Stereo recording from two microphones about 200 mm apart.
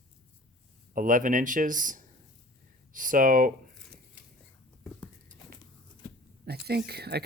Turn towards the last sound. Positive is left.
turn(degrees=-55)  # may be behind; listen again after turning